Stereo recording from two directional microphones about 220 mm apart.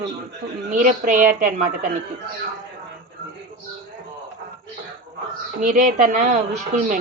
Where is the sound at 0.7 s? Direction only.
35° right (ahead or behind).